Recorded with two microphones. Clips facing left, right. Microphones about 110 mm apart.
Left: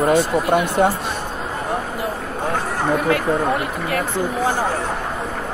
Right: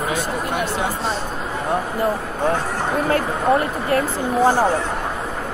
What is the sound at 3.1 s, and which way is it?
Speech, 35° right (ahead or behind).